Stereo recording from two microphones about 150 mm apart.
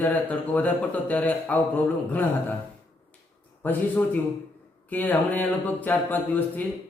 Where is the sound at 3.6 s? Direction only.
10° left (ahead or behind).